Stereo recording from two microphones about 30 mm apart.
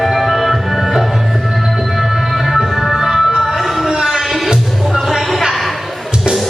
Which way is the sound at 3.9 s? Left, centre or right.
Centre.